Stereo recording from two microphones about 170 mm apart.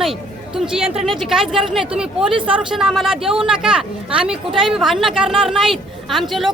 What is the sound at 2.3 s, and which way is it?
Speech, 30° right (ahead or behind).